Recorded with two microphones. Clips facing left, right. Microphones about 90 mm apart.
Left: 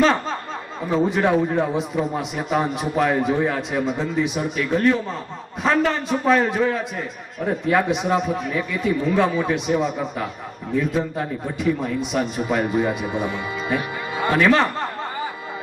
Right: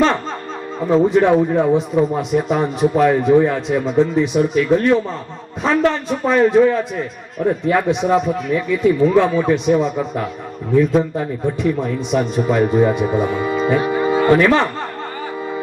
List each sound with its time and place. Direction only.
0.0 s snicker: centre (ahead or behind)
0.9 s a man's voice: centre (ahead or behind)
11.2 s a man's voice: centre (ahead or behind)
13.1 s speech: 40° right (ahead or behind)
13.7 s music: 30° right (ahead or behind)
14.3 s speech: centre (ahead or behind)